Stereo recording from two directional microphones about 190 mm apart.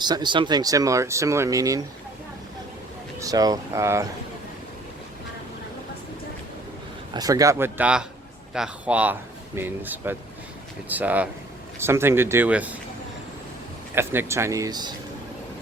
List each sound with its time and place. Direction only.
0.0 s speech: 20° right (ahead or behind)
3.2 s speech: 20° right (ahead or behind)
7.1 s speech: 20° right (ahead or behind)
13.9 s speech: 10° right (ahead or behind)